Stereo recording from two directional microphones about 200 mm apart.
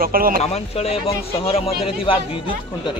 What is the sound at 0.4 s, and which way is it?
Speech, 30° left (ahead or behind).